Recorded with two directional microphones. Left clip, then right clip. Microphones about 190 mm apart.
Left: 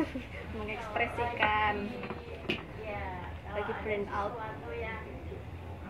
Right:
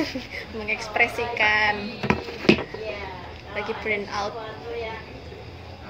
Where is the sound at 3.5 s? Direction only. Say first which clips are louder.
Right 7 dB; 20° right (ahead or behind).